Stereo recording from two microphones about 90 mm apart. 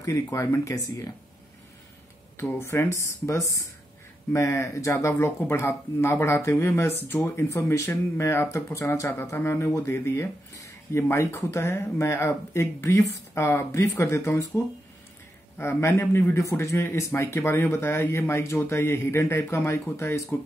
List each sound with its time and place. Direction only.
0.0 s speech: 35° left (ahead or behind)
2.6 s a man's voice: 30° left (ahead or behind)
15.5 s a man's voice: 30° left (ahead or behind)